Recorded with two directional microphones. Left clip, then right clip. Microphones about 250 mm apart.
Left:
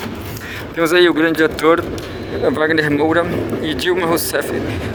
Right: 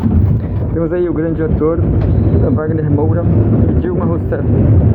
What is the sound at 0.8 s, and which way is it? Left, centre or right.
Speech, left.